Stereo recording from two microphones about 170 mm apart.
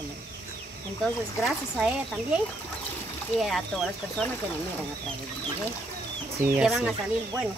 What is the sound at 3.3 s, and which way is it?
Speech, centre (ahead or behind).